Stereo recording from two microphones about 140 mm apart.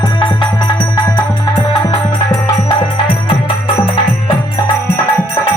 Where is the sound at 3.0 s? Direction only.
35° left (ahead or behind).